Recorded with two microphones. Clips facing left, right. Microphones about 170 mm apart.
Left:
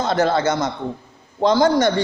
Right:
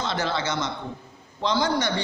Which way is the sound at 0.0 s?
45° left (ahead or behind).